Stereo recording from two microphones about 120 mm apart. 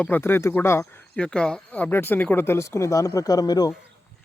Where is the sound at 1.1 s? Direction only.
10° left (ahead or behind); by 3.7 s 35° left (ahead or behind).